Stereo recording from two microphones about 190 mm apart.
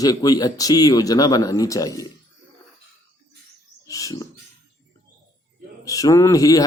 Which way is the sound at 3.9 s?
20° left (ahead or behind).